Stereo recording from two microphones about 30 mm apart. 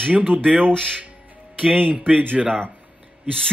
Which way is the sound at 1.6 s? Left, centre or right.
Right.